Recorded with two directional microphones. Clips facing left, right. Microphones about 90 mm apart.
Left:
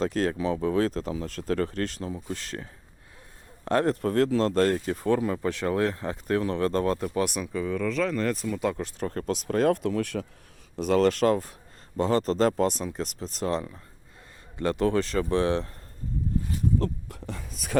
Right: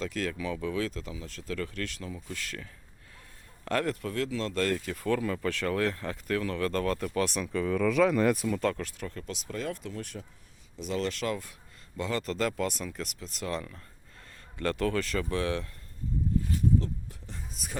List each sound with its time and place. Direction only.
0.0 s a man's voice: 35° left (ahead or behind)
4.0 s speech: 40° left (ahead or behind); by 8.4 s 10° right (ahead or behind)
8.4 s speech: 5° left (ahead or behind)
8.7 s speech: 25° left (ahead or behind)
9.0 s speech: 45° left (ahead or behind); by 10.2 s 80° left
10.8 s speech: 50° left (ahead or behind); by 15.7 s 30° left (ahead or behind)
16.7 s speech: 60° left (ahead or behind)